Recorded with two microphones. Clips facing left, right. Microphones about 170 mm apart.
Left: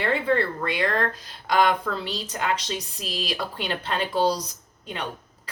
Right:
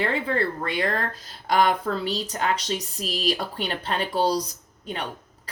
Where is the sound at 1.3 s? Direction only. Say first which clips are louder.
Right 1 dB; 40° right (ahead or behind).